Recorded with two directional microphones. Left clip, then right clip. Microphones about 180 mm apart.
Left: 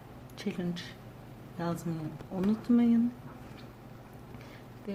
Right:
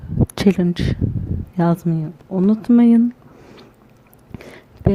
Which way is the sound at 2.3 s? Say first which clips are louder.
Right 13 dB; 45° right (ahead or behind).